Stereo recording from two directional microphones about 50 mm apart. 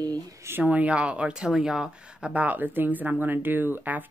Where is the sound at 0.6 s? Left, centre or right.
Right; by 1.9 s centre.